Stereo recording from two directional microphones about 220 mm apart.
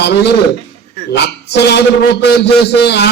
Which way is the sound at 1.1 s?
50° left (ahead or behind).